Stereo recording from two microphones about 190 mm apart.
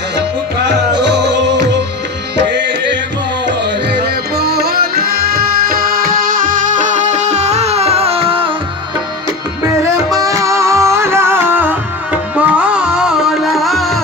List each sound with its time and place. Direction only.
1.0 s music: 65° right (ahead or behind)
3.4 s music: 60° right (ahead or behind); by 8.5 s 30° right (ahead or behind)
10.1 s music: 15° right (ahead or behind); by 14.0 s centre (ahead or behind)